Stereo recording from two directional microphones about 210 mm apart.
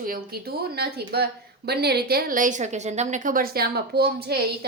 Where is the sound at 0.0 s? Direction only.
45° right (ahead or behind).